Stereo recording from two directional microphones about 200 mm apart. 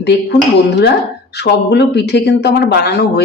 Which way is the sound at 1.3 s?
55° left (ahead or behind).